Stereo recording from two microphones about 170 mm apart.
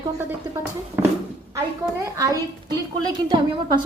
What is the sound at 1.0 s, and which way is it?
Speech, 10° right (ahead or behind).